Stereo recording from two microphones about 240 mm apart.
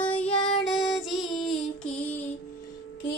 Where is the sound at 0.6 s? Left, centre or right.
Centre.